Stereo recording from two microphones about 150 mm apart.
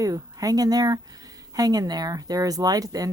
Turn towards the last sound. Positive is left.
turn(degrees=-25)  # may be behind; listen again after turning